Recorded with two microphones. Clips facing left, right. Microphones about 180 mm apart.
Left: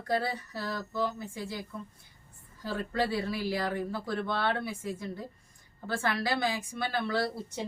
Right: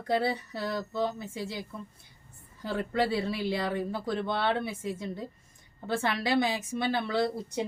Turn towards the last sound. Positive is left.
turn(degrees=-20)  # may be behind; listen again after turning